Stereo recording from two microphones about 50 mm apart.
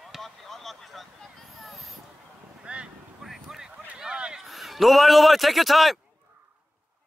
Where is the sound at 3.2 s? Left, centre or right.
Centre.